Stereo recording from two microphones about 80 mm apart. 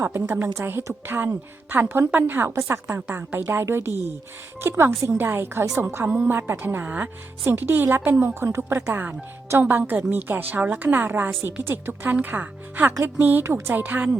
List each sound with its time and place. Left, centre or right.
0.0 s a woman's voice: right
13.4 s a woman's voice: right
13.7 s a woman's voice: right